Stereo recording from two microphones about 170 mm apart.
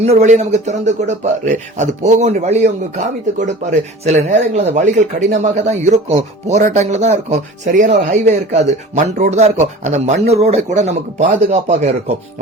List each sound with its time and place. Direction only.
0.0 s speech: 40° right (ahead or behind)